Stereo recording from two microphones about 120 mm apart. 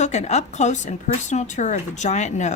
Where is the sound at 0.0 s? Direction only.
70° left (ahead or behind).